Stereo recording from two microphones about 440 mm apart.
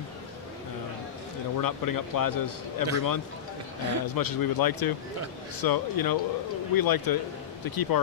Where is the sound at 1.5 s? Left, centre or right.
Left.